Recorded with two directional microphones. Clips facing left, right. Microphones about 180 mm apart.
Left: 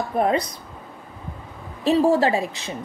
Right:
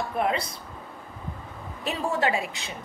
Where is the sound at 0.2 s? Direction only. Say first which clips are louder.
Left 6 dB; 40° left (ahead or behind).